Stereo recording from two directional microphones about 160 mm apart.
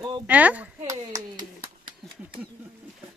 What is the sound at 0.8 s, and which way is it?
Speech, 20° right (ahead or behind).